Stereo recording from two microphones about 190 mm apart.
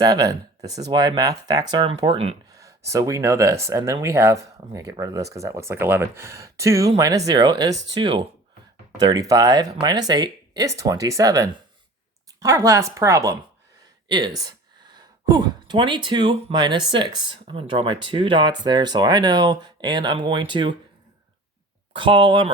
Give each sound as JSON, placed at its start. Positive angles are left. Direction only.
{"t": 0.0, "sound": "speech", "side_deg": -20}
{"t": 2.5, "sound": "speech", "side_deg": -15}
{"t": 21.9, "sound": "speech", "side_deg": -25}